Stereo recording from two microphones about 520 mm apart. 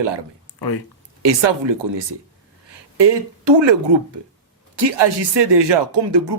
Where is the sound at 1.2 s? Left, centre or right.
Right.